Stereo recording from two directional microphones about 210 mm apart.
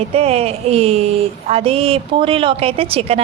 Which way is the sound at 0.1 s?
30° right (ahead or behind).